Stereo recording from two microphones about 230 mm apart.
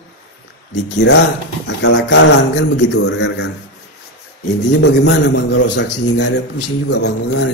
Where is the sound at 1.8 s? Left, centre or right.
Left.